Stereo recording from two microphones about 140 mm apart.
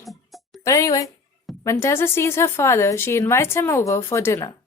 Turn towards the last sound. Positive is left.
turn(degrees=20)  # may be behind; listen again after turning